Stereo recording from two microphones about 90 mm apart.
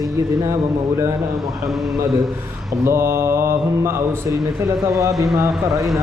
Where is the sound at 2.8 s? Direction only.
30° right (ahead or behind).